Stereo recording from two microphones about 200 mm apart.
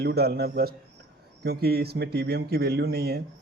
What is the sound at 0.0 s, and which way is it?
Speech, 55° right (ahead or behind).